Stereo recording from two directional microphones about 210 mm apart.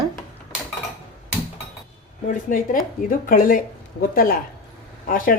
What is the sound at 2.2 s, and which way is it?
Speech, 40° left (ahead or behind).